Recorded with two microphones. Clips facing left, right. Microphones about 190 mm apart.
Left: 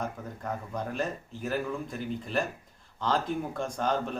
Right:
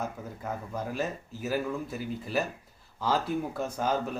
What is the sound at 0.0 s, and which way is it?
Speech, 5° right (ahead or behind).